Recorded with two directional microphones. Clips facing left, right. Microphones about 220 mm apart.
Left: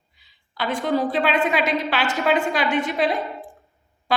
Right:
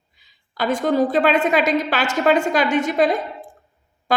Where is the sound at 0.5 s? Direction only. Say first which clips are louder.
Right 4 dB; 45° right (ahead or behind).